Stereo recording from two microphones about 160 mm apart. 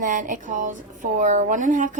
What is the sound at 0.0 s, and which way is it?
A woman's voice, 55° right (ahead or behind).